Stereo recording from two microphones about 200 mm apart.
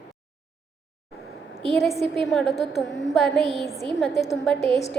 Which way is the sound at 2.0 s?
Centre (ahead or behind).